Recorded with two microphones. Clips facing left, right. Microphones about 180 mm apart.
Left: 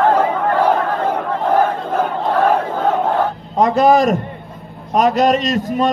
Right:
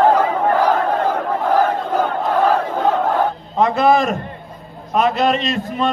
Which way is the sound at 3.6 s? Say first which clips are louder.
Left 2 dB; 40° left (ahead or behind).